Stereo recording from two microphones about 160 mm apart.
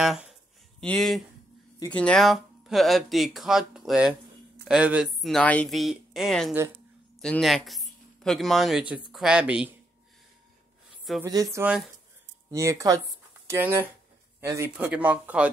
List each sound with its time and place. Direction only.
0.0 s a sound: centre (ahead or behind)
1.9 s speech: 5° left (ahead or behind)
11.2 s speech: 20° right (ahead or behind)